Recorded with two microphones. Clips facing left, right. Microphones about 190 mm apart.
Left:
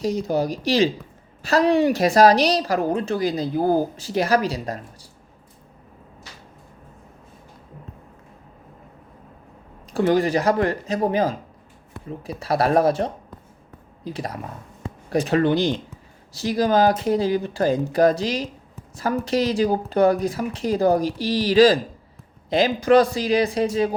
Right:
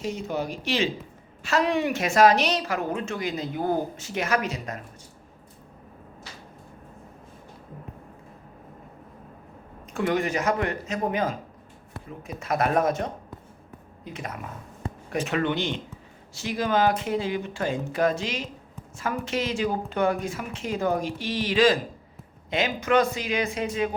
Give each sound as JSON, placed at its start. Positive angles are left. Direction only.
{"t": 0.0, "sound": "a woman's voice", "side_deg": 35}
{"t": 9.9, "sound": "a woman's voice", "side_deg": 35}